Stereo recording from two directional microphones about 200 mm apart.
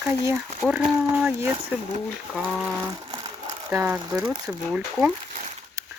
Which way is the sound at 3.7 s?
10° right (ahead or behind).